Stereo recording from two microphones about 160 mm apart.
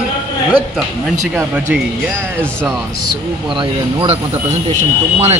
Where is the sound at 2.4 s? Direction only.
5° left (ahead or behind).